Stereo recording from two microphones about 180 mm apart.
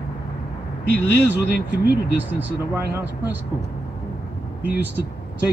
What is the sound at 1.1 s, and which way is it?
Speech, 70° left (ahead or behind).